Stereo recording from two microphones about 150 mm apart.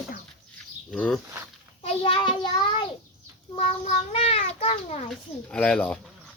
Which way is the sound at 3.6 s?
40° left (ahead or behind).